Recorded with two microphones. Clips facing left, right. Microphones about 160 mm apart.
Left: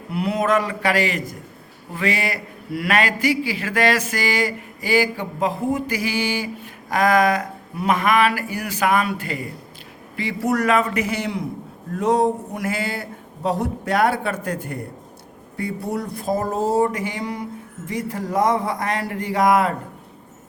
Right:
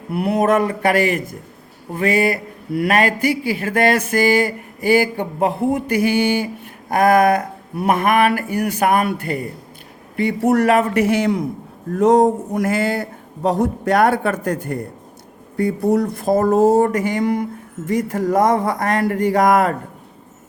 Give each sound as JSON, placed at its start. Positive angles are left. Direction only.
{"t": 0.1, "sound": "speech", "side_deg": -55}